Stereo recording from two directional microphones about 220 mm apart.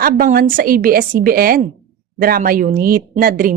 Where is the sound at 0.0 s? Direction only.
40° right (ahead or behind).